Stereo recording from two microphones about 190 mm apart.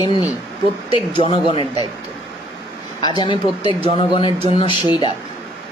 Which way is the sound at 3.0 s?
25° left (ahead or behind).